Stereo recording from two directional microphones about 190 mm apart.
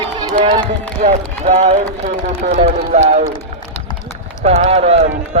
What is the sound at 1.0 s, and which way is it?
A man's voice, 35° right (ahead or behind).